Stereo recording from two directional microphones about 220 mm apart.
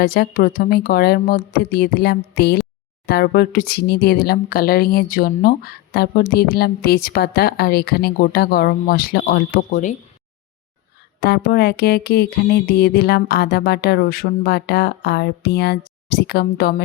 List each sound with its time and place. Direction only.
0.0 s speech: 40° left (ahead or behind)
11.2 s speech: 45° left (ahead or behind)